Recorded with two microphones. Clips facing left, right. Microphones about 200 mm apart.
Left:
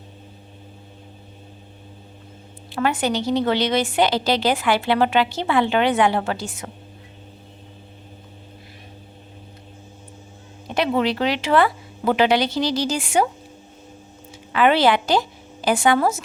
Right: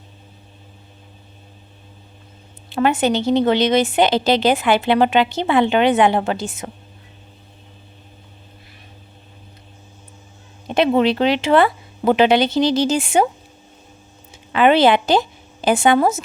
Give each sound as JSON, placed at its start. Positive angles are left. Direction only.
{"t": 2.6, "sound": "a woman's voice", "side_deg": -20}
{"t": 10.7, "sound": "a woman's voice", "side_deg": -25}
{"t": 14.5, "sound": "a woman's voice", "side_deg": -20}